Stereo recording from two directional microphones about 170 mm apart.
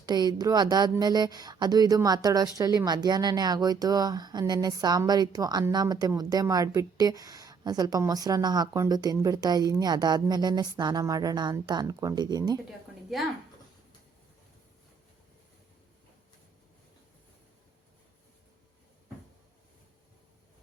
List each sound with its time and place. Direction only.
0.0 s a woman's voice: 25° right (ahead or behind)